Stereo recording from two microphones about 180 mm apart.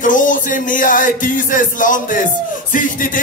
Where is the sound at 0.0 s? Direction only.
45° left (ahead or behind).